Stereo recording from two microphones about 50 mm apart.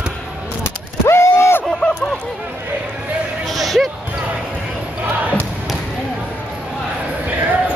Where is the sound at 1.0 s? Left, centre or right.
Left.